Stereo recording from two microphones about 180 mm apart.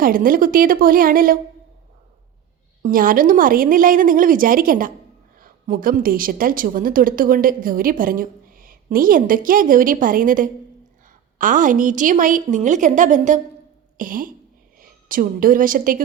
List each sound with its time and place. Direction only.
0.0 s a woman's voice: 50° right (ahead or behind)
2.8 s a woman's voice: 50° right (ahead or behind)